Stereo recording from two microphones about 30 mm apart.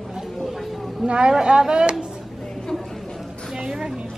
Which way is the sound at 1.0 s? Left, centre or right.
Right.